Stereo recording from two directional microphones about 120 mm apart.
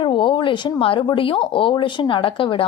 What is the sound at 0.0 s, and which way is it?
A woman's voice, 45° left (ahead or behind).